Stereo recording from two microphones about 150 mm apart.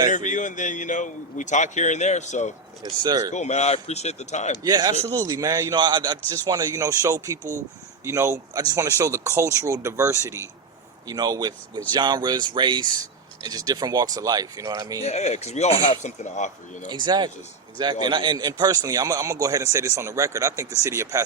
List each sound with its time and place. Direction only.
0.1 s a man's voice: 55° left (ahead or behind)
3.0 s a man's voice: 25° right (ahead or behind)
3.3 s speech: 50° left (ahead or behind)
4.6 s a man's voice: 25° right (ahead or behind)
15.0 s speech: 45° left (ahead or behind)
16.9 s a man's voice: 30° right (ahead or behind)